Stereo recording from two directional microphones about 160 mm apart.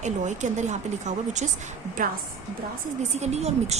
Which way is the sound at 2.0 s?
60° right (ahead or behind).